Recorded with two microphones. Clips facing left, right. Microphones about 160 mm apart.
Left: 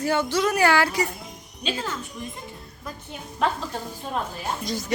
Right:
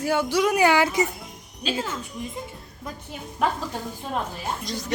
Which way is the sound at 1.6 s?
5° right (ahead or behind).